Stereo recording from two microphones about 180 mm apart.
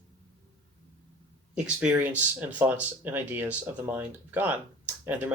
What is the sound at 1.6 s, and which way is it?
Speech, 5° right (ahead or behind).